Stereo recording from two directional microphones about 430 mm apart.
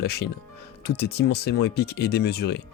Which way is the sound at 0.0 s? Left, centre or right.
Left.